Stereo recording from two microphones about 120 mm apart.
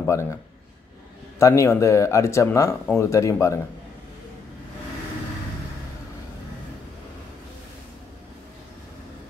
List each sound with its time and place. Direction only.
0.0 s speech: 25° left (ahead or behind)
1.4 s speech: 25° left (ahead or behind)